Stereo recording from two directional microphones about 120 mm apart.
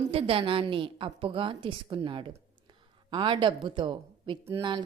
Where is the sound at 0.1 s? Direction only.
50° right (ahead or behind).